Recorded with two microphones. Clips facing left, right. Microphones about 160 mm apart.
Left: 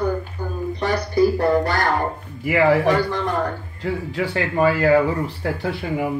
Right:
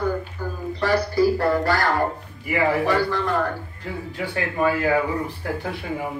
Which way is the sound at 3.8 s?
90° left.